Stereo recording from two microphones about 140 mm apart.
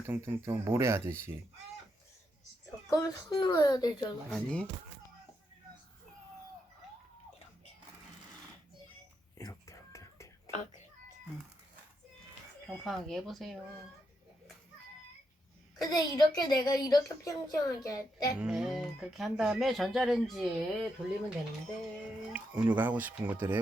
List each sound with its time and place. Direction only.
0.0 s speech: 15° right (ahead or behind)
2.9 s a woman's voice: 30° left (ahead or behind)
4.3 s speech: 5° left (ahead or behind)
9.4 s whispering: 25° left (ahead or behind)
12.6 s speech: centre (ahead or behind)
16.0 s a woman's voice: 30° left (ahead or behind)
18.3 s speech: 5° right (ahead or behind)
22.3 s speech: 10° right (ahead or behind)